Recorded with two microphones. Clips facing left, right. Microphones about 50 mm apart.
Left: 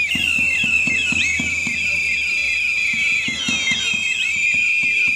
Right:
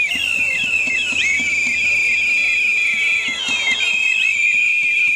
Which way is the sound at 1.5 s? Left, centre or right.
Right.